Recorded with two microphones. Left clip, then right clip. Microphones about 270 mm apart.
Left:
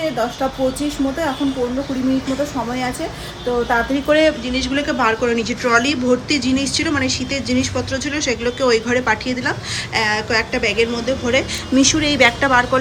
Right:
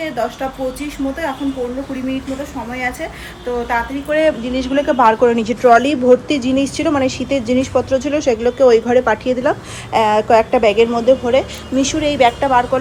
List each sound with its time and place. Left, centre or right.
4.1 s speech: centre